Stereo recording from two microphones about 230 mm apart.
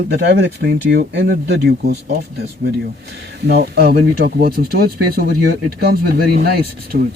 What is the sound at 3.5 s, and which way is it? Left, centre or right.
Speech, right.